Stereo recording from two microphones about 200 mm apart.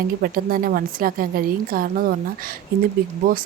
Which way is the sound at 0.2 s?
45° right (ahead or behind).